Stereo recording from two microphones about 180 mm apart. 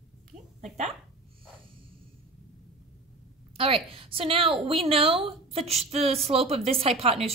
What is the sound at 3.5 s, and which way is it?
A woman's voice, 30° right (ahead or behind).